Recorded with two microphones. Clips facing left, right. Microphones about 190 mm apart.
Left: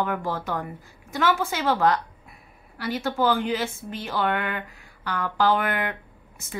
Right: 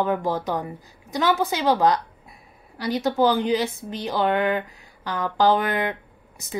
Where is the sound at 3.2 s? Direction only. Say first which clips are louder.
Right 2 dB; 20° right (ahead or behind).